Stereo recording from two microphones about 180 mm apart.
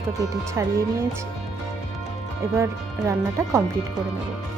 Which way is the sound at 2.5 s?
15° right (ahead or behind).